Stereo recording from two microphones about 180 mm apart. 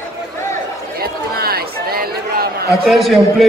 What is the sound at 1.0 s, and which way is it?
Chatter, 60° right (ahead or behind).